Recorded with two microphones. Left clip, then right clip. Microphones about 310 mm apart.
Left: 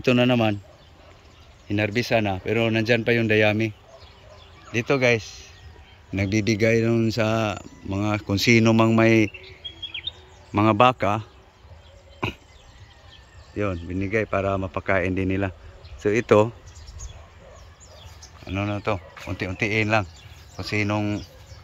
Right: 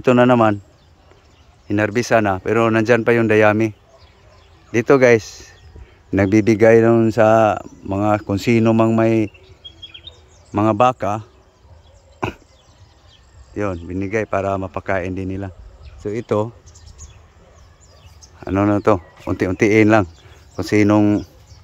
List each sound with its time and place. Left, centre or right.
0.0 s speech: centre
1.7 s speech: centre
4.7 s speech: centre
9.9 s a sound: right
10.5 s speech: centre
13.8 s speech: centre
18.5 s speech: centre